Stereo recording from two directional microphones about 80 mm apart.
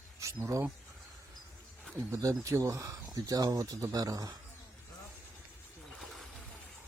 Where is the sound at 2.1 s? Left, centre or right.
Right.